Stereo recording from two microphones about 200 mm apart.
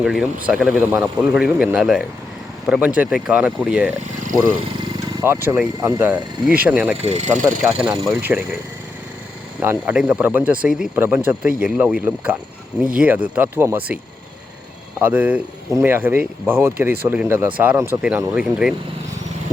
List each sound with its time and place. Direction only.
0.0 s speech: 5° right (ahead or behind)
7.0 s speech: 35° right (ahead or behind)
7.6 s speech: 5° right (ahead or behind)
9.6 s speech: 10° right (ahead or behind)
15.0 s speech: 10° right (ahead or behind)